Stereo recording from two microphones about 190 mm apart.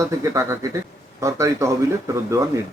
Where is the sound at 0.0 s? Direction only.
15° right (ahead or behind).